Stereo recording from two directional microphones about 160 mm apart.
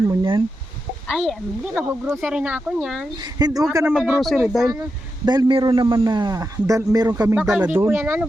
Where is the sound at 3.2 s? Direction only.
25° right (ahead or behind).